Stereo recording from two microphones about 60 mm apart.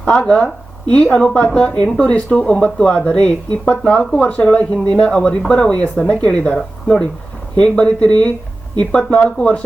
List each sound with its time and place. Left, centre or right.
0.0 s speech: centre